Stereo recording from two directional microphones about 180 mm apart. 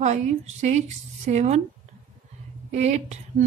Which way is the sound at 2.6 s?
40° right (ahead or behind).